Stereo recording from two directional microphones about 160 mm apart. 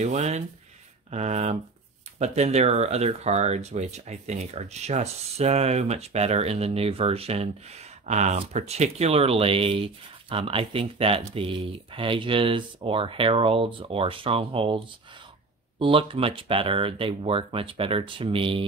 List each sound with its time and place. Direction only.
0.0 s speech: 45° right (ahead or behind)
15.8 s speech: 35° right (ahead or behind)